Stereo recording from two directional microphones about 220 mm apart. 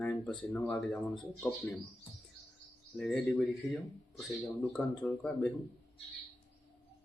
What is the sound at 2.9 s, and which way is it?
Speech, 5° left (ahead or behind).